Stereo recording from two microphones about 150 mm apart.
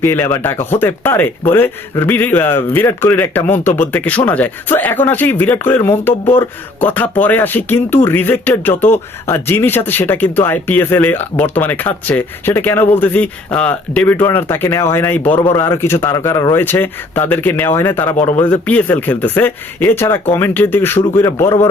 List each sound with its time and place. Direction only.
0.0 s speech: 15° left (ahead or behind)